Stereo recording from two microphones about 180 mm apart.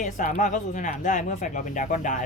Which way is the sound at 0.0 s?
45° left (ahead or behind).